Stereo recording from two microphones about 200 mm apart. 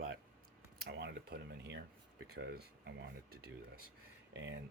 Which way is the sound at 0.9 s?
55° right (ahead or behind).